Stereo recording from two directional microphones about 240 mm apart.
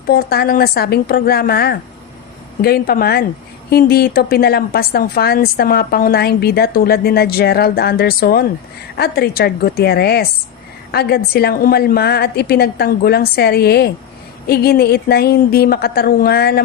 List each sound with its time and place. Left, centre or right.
0.1 s a woman's voice: left